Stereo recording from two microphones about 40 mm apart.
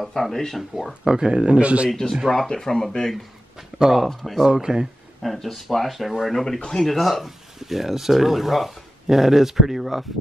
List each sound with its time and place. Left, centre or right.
0.0 s speech: centre
1.0 s speech: centre
1.9 s speech: centre
3.5 s speech: centre
4.5 s speech: centre
5.2 s speech: centre